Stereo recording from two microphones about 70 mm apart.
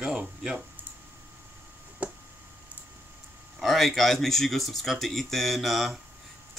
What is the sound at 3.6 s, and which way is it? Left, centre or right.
Speech, centre.